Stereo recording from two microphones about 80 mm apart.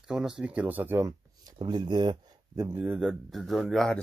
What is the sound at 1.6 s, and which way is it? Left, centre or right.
Speech, right.